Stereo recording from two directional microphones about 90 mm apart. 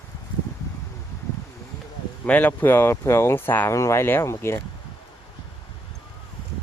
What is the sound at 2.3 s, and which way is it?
Speech, 20° left (ahead or behind).